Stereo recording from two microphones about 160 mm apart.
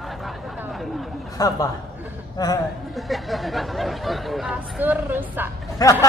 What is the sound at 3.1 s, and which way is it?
Speech, centre (ahead or behind).